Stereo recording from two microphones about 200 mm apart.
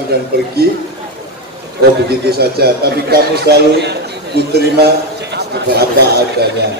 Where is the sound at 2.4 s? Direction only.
50° right (ahead or behind).